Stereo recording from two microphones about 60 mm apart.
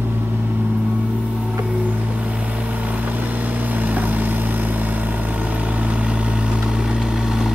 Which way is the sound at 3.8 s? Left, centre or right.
Right.